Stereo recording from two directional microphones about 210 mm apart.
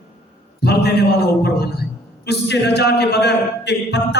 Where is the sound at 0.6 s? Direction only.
50° left (ahead or behind).